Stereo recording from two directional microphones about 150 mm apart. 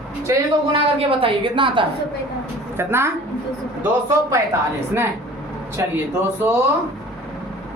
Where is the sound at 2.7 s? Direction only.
15° right (ahead or behind).